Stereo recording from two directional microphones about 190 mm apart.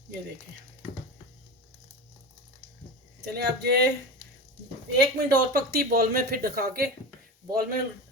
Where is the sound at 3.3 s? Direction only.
60° right (ahead or behind).